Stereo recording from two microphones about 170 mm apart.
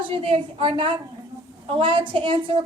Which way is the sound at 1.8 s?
30° right (ahead or behind).